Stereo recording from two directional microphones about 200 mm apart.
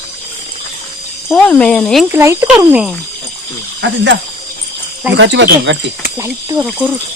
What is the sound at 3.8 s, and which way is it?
Speech, 65° right (ahead or behind).